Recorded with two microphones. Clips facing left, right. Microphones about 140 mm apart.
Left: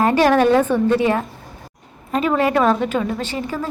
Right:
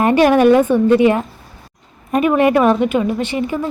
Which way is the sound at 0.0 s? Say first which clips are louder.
Right 3 dB; 15° right (ahead or behind).